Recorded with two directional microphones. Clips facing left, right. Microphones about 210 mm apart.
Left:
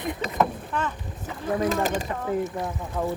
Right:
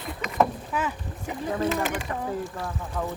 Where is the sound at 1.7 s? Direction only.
40° left (ahead or behind).